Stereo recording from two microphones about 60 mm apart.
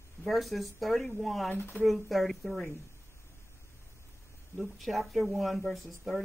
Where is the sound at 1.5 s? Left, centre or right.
Left.